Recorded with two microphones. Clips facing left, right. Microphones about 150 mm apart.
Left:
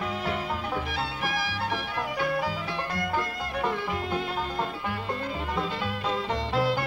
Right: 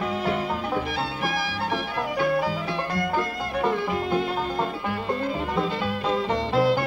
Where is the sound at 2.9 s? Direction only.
40° right (ahead or behind).